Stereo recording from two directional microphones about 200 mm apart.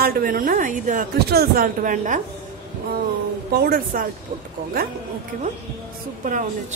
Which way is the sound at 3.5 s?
45° right (ahead or behind).